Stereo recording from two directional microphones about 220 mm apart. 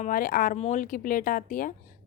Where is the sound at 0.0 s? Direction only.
40° left (ahead or behind).